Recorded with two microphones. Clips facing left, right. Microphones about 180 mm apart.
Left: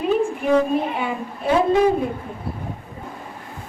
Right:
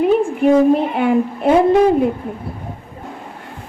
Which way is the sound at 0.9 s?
60° right (ahead or behind).